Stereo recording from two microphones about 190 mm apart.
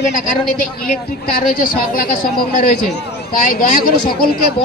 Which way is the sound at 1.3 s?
45° left (ahead or behind).